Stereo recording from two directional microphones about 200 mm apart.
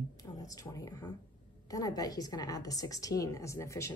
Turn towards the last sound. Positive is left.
turn(degrees=15)  # may be behind; listen again after turning